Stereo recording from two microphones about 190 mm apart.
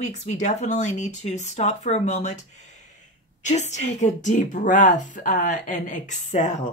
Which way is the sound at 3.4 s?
40° left (ahead or behind).